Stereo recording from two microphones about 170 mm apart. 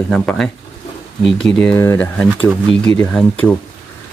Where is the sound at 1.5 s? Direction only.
10° left (ahead or behind).